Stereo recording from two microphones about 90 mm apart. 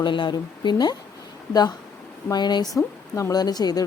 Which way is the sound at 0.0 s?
60° left (ahead or behind).